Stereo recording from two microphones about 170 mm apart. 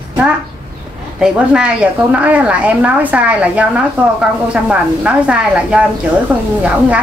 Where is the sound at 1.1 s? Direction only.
5° right (ahead or behind).